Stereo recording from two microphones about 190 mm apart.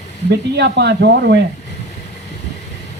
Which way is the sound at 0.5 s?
65° right (ahead or behind).